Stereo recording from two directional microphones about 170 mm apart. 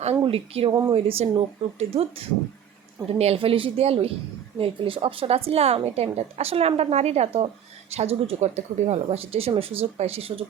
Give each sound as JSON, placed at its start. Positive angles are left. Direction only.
{"t": 0.2, "sound": "a woman's voice", "side_deg": -35}